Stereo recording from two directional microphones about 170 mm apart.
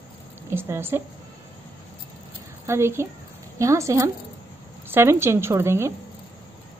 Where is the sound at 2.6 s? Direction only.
15° right (ahead or behind).